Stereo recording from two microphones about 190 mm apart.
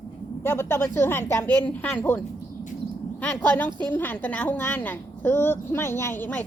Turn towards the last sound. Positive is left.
turn(degrees=10)  # may be behind; listen again after turning